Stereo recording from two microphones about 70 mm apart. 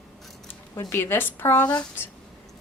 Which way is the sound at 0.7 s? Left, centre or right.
Left.